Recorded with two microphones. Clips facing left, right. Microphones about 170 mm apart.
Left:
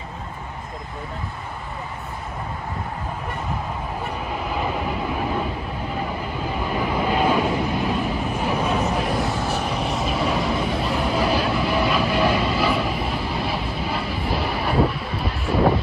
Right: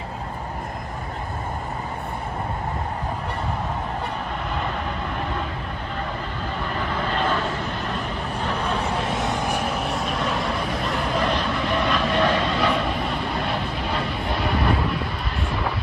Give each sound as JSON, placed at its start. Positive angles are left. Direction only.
{"t": 4.6, "sound": "vehicle", "side_deg": 5}
{"t": 6.6, "sound": "vehicle", "side_deg": 10}
{"t": 9.2, "sound": "vehicle", "side_deg": -15}
{"t": 9.8, "sound": "vehicle", "side_deg": 0}